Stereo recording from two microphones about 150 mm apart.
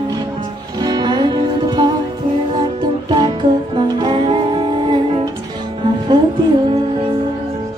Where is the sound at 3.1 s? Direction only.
30° right (ahead or behind).